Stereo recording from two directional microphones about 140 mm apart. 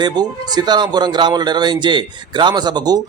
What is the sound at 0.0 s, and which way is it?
Speech, 30° right (ahead or behind).